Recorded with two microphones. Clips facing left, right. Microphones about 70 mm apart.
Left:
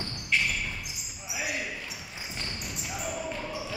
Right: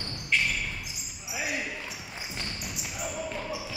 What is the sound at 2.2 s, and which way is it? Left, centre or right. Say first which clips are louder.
Basketball bounce: even; centre.